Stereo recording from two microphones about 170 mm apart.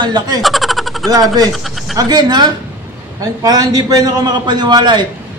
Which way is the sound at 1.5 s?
Centre (ahead or behind).